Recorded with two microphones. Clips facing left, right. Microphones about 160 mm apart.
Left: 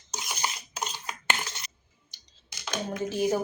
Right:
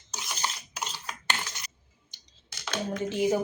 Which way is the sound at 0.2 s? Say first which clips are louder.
Left 1 dB; 15° left (ahead or behind).